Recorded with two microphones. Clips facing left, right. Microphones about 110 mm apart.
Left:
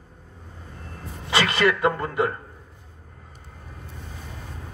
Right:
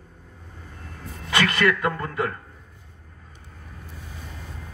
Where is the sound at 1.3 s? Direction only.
25° left (ahead or behind).